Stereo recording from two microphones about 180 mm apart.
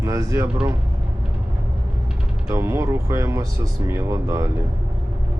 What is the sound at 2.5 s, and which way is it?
Speech, 15° right (ahead or behind).